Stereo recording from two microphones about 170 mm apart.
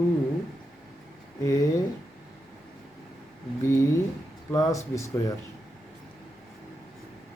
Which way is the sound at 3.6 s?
15° left (ahead or behind).